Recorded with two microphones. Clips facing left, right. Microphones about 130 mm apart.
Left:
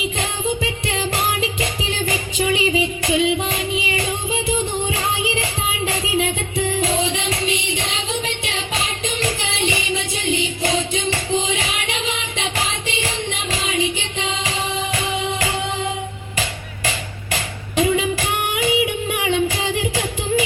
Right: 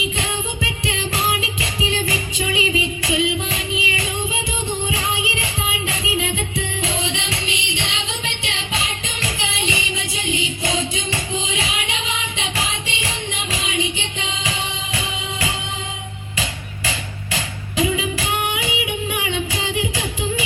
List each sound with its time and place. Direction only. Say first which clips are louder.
0.0 s music: left 2 dB; 45° left (ahead or behind)
17.3 s female singing: left 2 dB; 45° left (ahead or behind)